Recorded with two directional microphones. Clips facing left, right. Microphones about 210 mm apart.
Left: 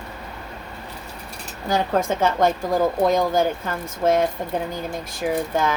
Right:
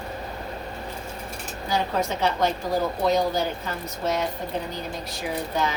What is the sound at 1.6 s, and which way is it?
A woman's voice, 50° left (ahead or behind).